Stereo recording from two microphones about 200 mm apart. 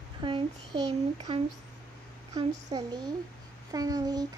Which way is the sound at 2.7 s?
20° right (ahead or behind).